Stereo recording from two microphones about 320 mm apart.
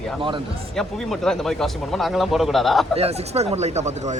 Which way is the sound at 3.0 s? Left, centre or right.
Centre.